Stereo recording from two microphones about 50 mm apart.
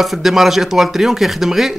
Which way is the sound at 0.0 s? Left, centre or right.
Centre.